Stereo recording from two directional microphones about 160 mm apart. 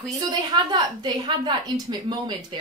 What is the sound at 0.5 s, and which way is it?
Speech, 30° right (ahead or behind).